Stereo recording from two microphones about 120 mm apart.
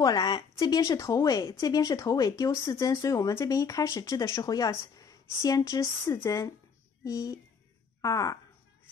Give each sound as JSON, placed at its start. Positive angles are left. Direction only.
{"t": 0.0, "sound": "a woman's voice", "side_deg": 30}